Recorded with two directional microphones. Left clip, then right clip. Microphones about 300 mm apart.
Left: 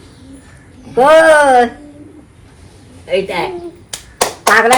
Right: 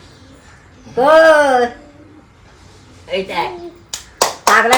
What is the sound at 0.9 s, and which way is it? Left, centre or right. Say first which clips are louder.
Speech: left 2 dB; left.